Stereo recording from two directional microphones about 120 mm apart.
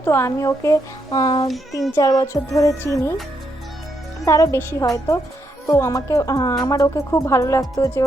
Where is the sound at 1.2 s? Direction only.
40° left (ahead or behind).